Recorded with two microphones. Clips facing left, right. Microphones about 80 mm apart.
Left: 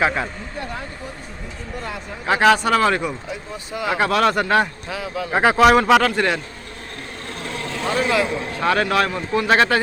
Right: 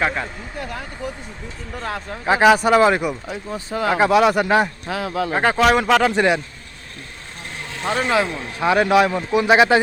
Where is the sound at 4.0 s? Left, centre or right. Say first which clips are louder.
Right 3 dB; centre.